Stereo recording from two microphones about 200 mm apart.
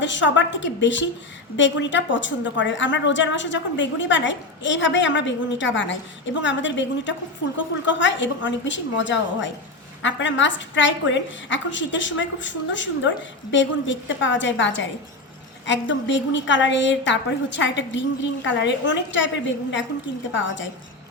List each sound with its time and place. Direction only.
0.0 s a woman's voice: 65° left (ahead or behind)
20.3 s a woman's voice: 65° left (ahead or behind)